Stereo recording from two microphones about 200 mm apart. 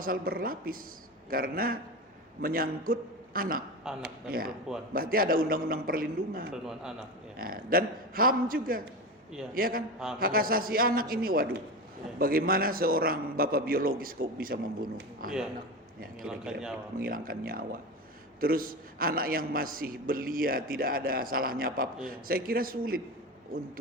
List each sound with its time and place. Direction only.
0.0 s a man's voice: 45° right (ahead or behind)
3.9 s a man's voice: centre (ahead or behind)
4.3 s a man's voice: 45° right (ahead or behind)
6.5 s a man's voice: 5° right (ahead or behind)
7.3 s a man's voice: 45° right (ahead or behind)
16.2 s a man's voice: 5° right (ahead or behind)
17.0 s a man's voice: 45° right (ahead or behind)